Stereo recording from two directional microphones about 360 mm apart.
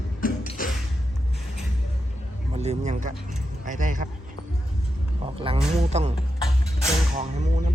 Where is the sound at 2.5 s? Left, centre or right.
Centre.